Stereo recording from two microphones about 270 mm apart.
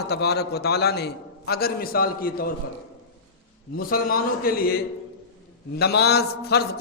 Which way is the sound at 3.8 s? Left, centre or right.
Left.